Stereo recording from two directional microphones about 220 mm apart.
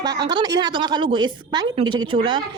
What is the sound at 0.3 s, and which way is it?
A woman's voice, 20° right (ahead or behind).